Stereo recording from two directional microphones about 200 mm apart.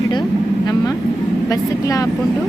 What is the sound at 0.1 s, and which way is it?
Vehicle, 20° left (ahead or behind).